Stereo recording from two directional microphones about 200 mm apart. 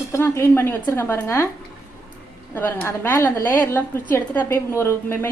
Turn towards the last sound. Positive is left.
turn(degrees=10)  # may be behind; listen again after turning